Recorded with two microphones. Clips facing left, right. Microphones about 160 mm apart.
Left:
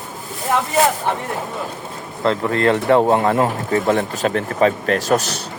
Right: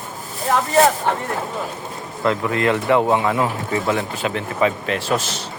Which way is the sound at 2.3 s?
35° left (ahead or behind).